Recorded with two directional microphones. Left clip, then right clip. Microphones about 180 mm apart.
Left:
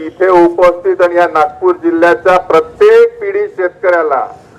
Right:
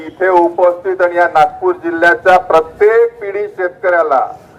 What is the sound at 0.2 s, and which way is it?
A man's voice, 20° left (ahead or behind).